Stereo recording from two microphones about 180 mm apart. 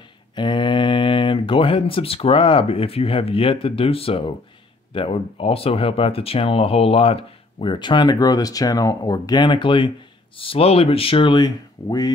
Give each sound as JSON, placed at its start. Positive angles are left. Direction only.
{"t": 0.4, "sound": "speech", "side_deg": 25}